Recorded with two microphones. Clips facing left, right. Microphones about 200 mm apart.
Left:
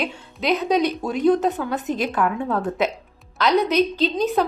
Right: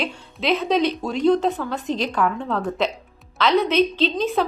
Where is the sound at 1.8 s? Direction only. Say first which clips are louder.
Right 1 dB; 50° left (ahead or behind).